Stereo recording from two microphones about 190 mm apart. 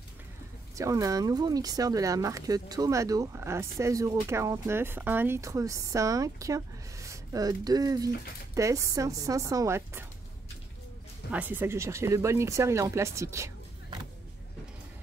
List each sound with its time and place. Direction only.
0.7 s speech: 15° right (ahead or behind)
11.3 s speech: 10° right (ahead or behind)